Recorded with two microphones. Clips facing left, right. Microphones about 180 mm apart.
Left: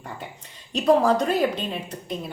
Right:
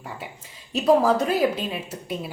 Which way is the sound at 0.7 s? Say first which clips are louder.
Even; 5° right (ahead or behind).